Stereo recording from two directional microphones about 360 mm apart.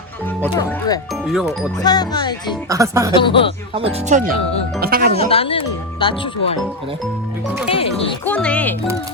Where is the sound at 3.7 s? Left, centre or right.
Centre.